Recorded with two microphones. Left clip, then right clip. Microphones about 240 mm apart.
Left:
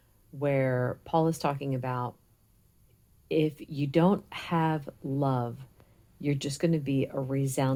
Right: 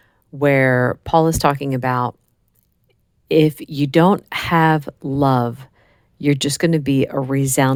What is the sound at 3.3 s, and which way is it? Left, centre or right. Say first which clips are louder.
Speech: right 13 dB; right.